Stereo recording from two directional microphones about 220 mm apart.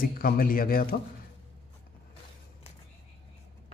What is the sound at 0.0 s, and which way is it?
Speech, 40° left (ahead or behind).